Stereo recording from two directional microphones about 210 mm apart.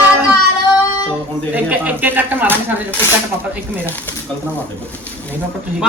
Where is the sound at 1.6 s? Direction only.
5° right (ahead or behind).